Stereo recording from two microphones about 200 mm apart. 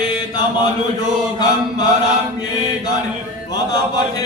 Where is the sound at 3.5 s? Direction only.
20° left (ahead or behind).